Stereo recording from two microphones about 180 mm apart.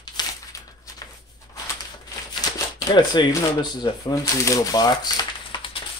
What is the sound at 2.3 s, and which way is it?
Speech, 25° left (ahead or behind).